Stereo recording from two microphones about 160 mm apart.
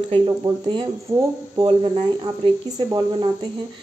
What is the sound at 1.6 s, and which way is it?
Speech, 35° right (ahead or behind).